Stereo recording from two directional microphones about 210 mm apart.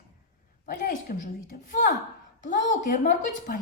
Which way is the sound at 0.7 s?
45° left (ahead or behind).